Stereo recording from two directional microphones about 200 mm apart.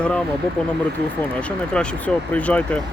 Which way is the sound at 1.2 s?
5° left (ahead or behind).